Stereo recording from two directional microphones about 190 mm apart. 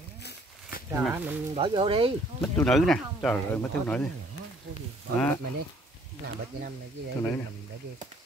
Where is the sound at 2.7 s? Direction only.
Centre (ahead or behind).